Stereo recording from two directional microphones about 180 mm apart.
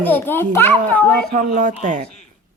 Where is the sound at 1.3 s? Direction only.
50° right (ahead or behind).